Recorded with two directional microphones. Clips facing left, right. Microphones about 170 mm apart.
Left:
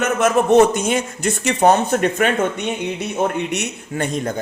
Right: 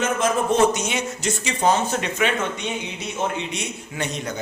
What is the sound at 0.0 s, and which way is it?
A man's voice, 65° left (ahead or behind).